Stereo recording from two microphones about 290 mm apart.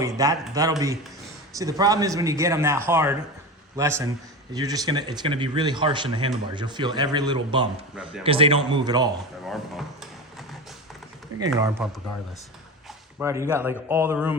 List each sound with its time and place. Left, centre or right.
0.2 s speech: centre
9.5 s speech: centre
11.3 s speech: right
11.8 s speech: centre
13.1 s speech: centre